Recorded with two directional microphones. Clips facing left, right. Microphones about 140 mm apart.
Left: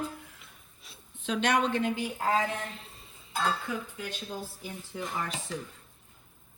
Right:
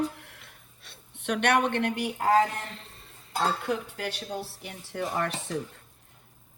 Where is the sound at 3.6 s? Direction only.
75° right (ahead or behind).